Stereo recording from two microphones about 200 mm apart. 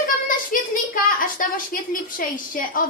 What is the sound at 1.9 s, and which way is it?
Speech, 45° left (ahead or behind).